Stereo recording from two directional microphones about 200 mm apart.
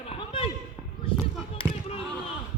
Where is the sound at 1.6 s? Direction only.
30° left (ahead or behind).